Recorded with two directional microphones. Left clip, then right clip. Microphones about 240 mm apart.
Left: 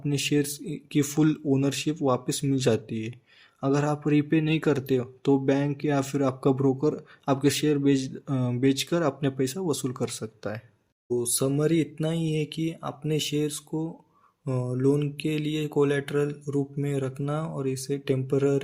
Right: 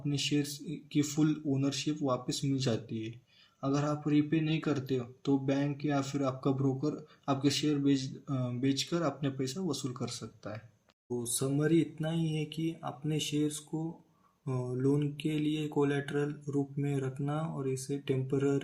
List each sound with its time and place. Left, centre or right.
0.0 s speech: left